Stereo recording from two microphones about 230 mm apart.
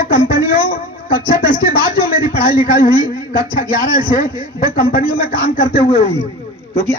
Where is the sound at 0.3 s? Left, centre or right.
Left.